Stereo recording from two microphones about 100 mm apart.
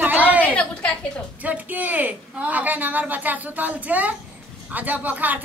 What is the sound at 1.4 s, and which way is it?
Speech, 15° right (ahead or behind).